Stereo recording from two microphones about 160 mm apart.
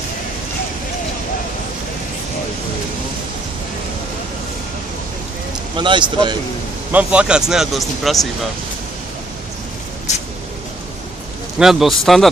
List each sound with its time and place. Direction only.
5.7 s speech: 30° right (ahead or behind)
6.9 s speech: 10° right (ahead or behind)
11.6 s speech: centre (ahead or behind)